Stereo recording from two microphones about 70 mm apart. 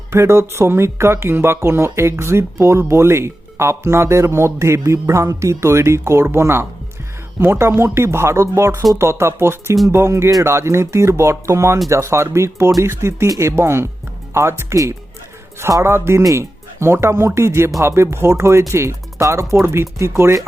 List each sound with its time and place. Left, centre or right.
0.1 s speech: right
15.8 s speech: right